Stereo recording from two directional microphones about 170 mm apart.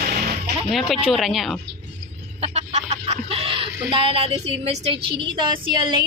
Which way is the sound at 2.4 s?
40° right (ahead or behind).